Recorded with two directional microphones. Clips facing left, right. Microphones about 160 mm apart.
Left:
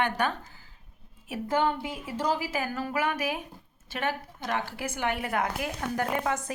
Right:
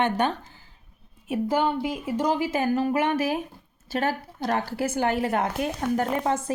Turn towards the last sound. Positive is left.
turn(degrees=-30)  # may be behind; listen again after turning